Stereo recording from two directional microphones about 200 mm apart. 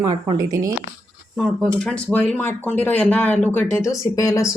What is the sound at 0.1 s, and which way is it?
Speech, 20° right (ahead or behind).